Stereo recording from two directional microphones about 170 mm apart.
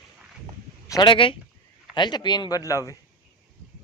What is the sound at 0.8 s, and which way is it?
Speech, 25° left (ahead or behind).